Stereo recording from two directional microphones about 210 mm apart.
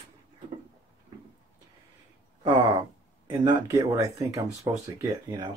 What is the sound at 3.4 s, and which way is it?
Speech, 20° right (ahead or behind).